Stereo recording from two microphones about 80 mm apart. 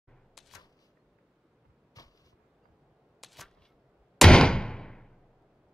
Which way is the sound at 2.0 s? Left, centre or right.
Left.